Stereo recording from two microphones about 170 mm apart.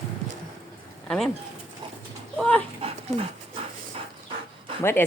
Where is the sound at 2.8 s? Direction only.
35° right (ahead or behind).